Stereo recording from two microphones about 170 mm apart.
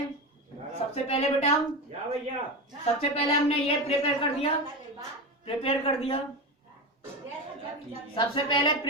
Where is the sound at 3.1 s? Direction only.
35° left (ahead or behind).